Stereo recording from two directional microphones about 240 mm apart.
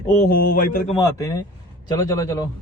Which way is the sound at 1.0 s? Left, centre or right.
Centre.